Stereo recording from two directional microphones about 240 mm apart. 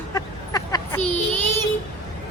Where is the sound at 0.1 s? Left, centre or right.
Centre.